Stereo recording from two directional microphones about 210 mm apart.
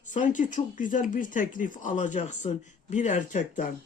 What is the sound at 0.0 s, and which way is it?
Speech, 35° left (ahead or behind).